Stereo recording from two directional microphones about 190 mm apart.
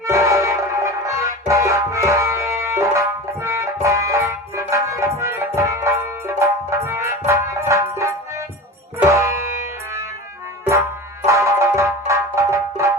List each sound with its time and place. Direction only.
0.0 s music: 15° right (ahead or behind)
11.3 s music: 15° right (ahead or behind)